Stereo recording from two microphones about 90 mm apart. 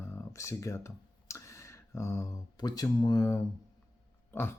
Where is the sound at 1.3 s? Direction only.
35° left (ahead or behind).